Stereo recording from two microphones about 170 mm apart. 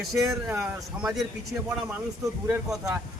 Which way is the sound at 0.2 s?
15° right (ahead or behind).